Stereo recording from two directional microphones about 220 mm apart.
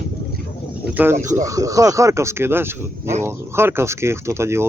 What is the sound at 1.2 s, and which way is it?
Speech, 35° right (ahead or behind).